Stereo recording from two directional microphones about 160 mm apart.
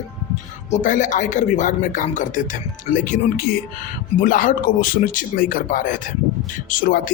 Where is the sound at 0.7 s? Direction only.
50° left (ahead or behind).